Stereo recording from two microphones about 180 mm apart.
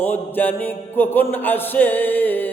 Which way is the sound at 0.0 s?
10° left (ahead or behind).